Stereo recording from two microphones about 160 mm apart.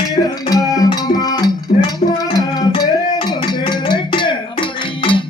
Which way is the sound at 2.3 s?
30° left (ahead or behind).